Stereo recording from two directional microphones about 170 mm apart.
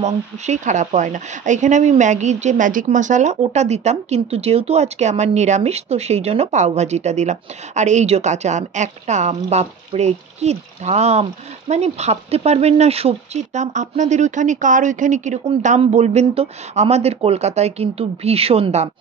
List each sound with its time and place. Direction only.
0.0 s speech: 45° right (ahead or behind)